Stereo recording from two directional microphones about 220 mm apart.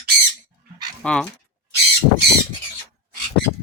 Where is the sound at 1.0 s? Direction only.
5° left (ahead or behind).